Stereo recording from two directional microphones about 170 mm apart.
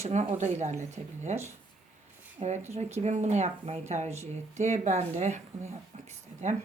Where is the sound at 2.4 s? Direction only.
40° right (ahead or behind).